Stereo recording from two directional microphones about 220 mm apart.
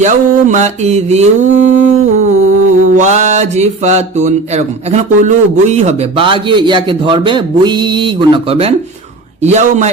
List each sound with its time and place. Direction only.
0.0 s mantra: 35° right (ahead or behind)